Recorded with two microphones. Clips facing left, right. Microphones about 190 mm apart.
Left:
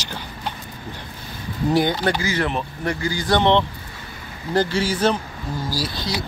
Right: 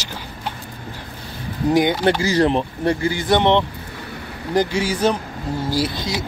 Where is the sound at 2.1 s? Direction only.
35° right (ahead or behind); by 5.1 s 15° right (ahead or behind).